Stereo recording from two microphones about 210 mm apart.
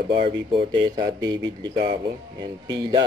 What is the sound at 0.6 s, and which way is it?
Speech, 20° right (ahead or behind).